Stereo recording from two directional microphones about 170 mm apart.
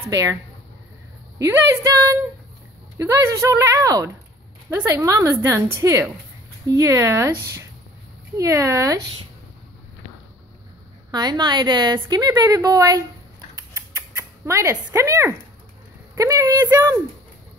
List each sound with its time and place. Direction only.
0.1 s a woman's voice: 20° right (ahead or behind)
1.4 s a woman's voice: 20° right (ahead or behind)
11.1 s a woman's voice: 25° right (ahead or behind)
14.1 s a sound: 15° right (ahead or behind)
14.9 s a woman's voice: 15° right (ahead or behind)